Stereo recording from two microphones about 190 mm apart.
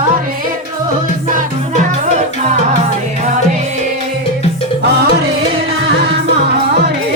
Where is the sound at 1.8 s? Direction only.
35° right (ahead or behind).